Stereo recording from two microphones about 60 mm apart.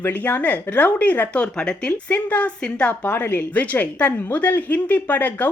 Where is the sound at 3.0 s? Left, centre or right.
Left.